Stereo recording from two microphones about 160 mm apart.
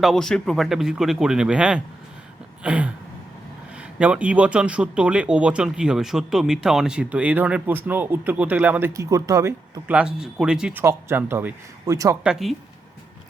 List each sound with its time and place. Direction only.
0.0 s speech: centre (ahead or behind); by 12.1 s 20° right (ahead or behind)
12.2 s speech: 5° right (ahead or behind)